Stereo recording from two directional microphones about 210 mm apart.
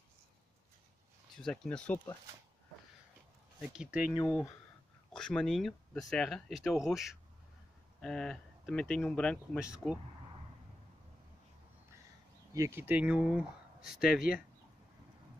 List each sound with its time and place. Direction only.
1.3 s speech: 5° left (ahead or behind)
3.6 s speech: 5° right (ahead or behind)
5.1 s speech: 5° left (ahead or behind)
12.5 s speech: 10° right (ahead or behind)